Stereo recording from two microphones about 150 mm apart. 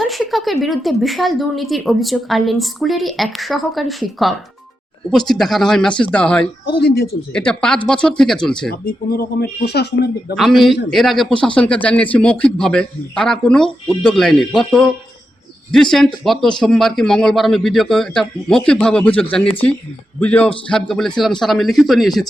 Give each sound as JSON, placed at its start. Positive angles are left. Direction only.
{"t": 0.1, "sound": "a man's voice", "side_deg": 0}
{"t": 6.7, "sound": "speech", "side_deg": 90}
{"t": 7.3, "sound": "a man's voice", "side_deg": 5}
{"t": 8.7, "sound": "speech", "side_deg": 90}
{"t": 10.3, "sound": "a man's voice", "side_deg": 0}